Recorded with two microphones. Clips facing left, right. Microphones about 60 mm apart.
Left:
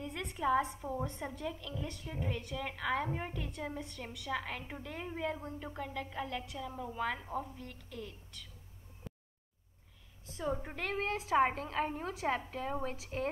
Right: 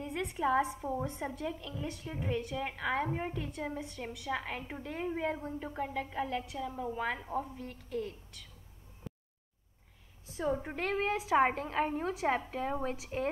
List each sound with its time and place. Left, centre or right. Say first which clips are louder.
0.0 s a sound: right 4 dB; centre
0.5 s a woman's voice: right 1 dB; centre
7.9 s a woman's voice: right 10 dB; right
10.5 s a woman's voice: right 4 dB; centre
12.5 s a woman's voice: right 3 dB; centre